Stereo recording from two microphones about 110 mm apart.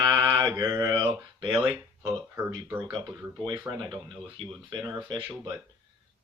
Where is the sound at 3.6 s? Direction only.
35° right (ahead or behind).